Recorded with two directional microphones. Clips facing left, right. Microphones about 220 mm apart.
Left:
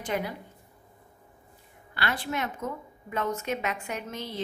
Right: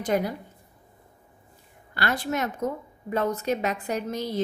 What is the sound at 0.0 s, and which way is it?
Speech, 40° right (ahead or behind).